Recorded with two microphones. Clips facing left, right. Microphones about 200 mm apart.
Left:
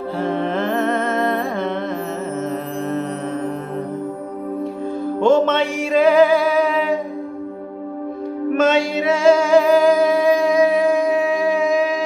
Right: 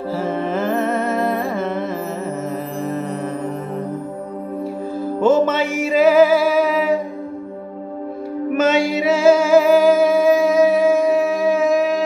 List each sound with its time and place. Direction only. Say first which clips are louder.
0.2 s music: left 2 dB; 5° right (ahead or behind)
2.8 s mantra: left 1 dB; 5° right (ahead or behind)
5.2 s music: even; 5° right (ahead or behind)
8.5 s music: even; 5° right (ahead or behind)